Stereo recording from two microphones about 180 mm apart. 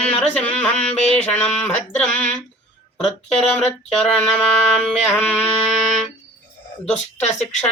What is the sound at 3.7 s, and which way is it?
Mantra, 5° left (ahead or behind).